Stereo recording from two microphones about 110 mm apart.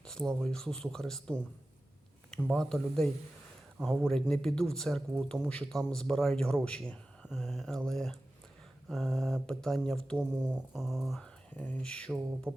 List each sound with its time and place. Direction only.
0.0 s speech: 5° left (ahead or behind)
10.5 s speech: 5° right (ahead or behind)
11.2 s speech: 15° left (ahead or behind)
12.5 s music: 20° right (ahead or behind)